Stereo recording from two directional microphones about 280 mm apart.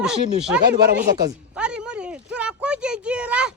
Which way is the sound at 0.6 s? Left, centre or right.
Right.